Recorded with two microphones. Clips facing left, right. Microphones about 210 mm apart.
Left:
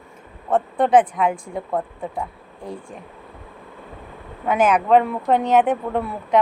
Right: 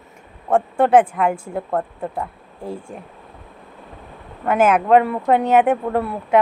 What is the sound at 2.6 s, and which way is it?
Speech, 25° right (ahead or behind).